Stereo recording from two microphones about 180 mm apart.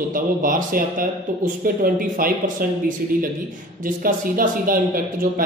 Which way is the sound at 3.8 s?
50° right (ahead or behind).